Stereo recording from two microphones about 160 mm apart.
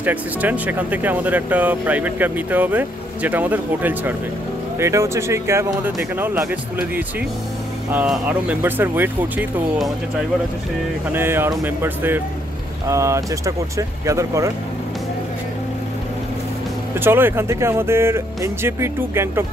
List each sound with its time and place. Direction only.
0.0 s speech: 10° right (ahead or behind)
11.1 s speech: 15° right (ahead or behind)
16.9 s speech: 15° right (ahead or behind)